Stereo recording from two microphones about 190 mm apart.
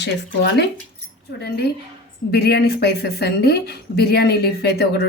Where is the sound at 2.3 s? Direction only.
60° left (ahead or behind).